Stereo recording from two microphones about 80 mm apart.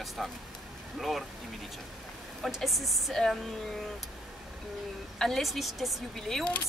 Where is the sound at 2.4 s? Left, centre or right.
Centre.